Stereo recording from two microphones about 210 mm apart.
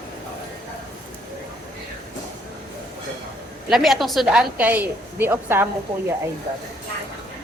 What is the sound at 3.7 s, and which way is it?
A woman's voice, centre (ahead or behind).